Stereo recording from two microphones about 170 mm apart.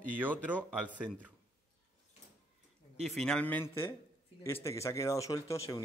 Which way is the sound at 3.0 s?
Centre (ahead or behind).